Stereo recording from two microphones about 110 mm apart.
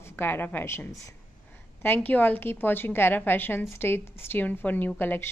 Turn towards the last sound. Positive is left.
turn(degrees=20)  # may be behind; listen again after turning